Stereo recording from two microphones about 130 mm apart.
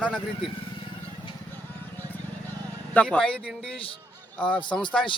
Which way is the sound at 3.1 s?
10° left (ahead or behind).